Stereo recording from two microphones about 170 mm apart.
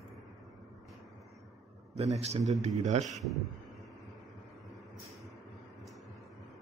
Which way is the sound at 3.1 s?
Centre (ahead or behind).